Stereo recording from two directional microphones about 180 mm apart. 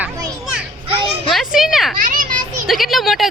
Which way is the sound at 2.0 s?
50° right (ahead or behind).